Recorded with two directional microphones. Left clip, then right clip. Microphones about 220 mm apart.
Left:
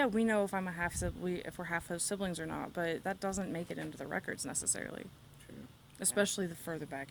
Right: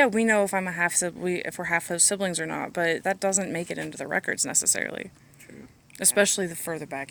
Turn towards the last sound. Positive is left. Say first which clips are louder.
# right 9 dB
turn(degrees=-25)  # may be behind; listen again after turning